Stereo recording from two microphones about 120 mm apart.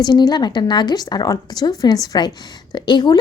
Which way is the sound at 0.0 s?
35° left (ahead or behind).